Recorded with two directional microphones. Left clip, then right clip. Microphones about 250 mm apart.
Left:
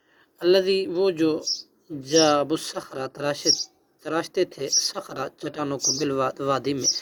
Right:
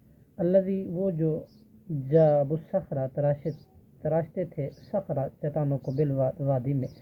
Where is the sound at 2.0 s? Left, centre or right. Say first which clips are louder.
Left 2 dB; left.